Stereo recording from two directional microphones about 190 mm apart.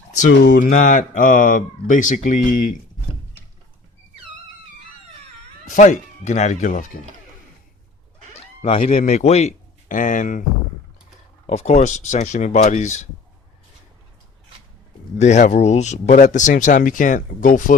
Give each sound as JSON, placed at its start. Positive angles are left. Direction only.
{"t": 0.1, "sound": "a sound", "side_deg": 40}
{"t": 0.4, "sound": "speech", "side_deg": 45}
{"t": 5.6, "sound": "speech", "side_deg": 40}
{"t": 8.8, "sound": "speech", "side_deg": 40}
{"t": 11.4, "sound": "speech", "side_deg": 35}
{"t": 15.2, "sound": "speech", "side_deg": 40}